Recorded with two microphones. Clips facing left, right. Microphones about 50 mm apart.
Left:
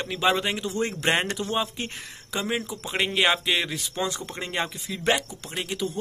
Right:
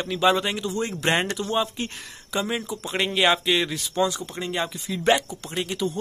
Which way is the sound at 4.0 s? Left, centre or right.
Left.